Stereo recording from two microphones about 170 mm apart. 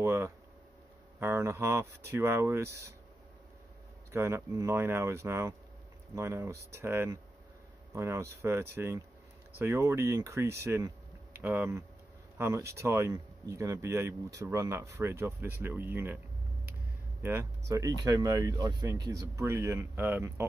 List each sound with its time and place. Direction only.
0.0 s speech: 15° right (ahead or behind)
4.1 s speech: 15° right (ahead or behind)
17.2 s speech: 15° right (ahead or behind)